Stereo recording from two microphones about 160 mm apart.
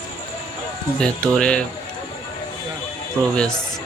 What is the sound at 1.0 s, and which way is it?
Speech, 5° left (ahead or behind).